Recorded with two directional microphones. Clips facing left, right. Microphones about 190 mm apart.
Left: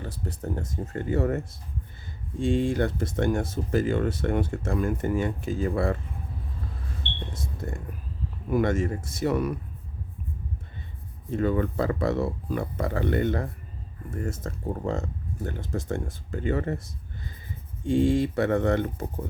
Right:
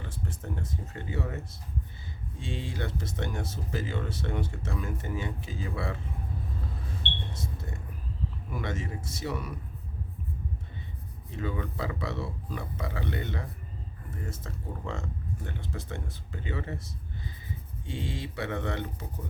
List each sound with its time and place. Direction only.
0.0 s speech: 40° left (ahead or behind)
2.4 s speech: 50° left (ahead or behind)
7.3 s speech: 50° left (ahead or behind)
11.3 s speech: 50° left (ahead or behind)